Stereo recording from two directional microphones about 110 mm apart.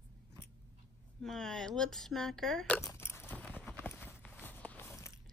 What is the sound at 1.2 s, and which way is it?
Speech, 5° left (ahead or behind).